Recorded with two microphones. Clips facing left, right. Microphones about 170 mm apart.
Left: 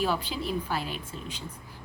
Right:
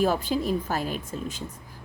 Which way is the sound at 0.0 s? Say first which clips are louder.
Right 5 dB; 45° right (ahead or behind).